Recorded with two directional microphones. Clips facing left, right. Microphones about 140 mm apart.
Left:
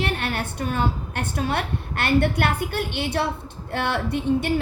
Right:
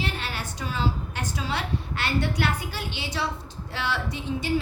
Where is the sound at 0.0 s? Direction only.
60° left (ahead or behind).